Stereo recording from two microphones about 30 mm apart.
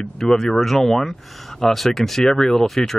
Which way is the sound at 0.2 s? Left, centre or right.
Centre.